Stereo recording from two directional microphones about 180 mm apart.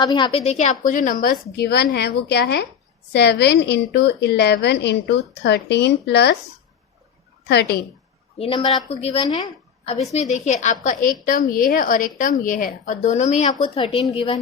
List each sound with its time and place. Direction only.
0.0 s a woman's voice: 25° left (ahead or behind)
0.5 s a woman's voice: 45° left (ahead or behind); by 6.3 s 70° left (ahead or behind)
7.4 s a woman's voice: 65° left (ahead or behind)
8.4 s a woman's voice: 30° left (ahead or behind)
10.1 s a woman's voice: 40° left (ahead or behind)